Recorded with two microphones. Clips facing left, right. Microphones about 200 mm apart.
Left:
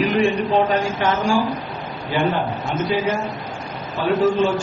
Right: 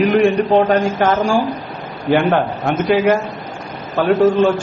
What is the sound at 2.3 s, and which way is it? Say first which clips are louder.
Speech: right 6 dB; 65° right (ahead or behind).